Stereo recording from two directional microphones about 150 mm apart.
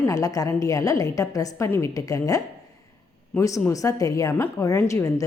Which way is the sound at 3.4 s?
20° left (ahead or behind).